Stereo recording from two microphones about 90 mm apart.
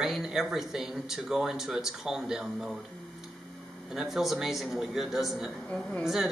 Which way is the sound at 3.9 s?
5° right (ahead or behind).